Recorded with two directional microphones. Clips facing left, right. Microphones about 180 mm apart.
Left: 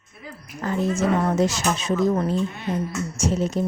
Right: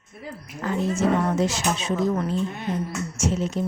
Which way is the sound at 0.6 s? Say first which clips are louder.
Left 1 dB; 40° left (ahead or behind).